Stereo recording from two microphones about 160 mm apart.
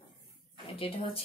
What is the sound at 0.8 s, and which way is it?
Speech, 35° left (ahead or behind).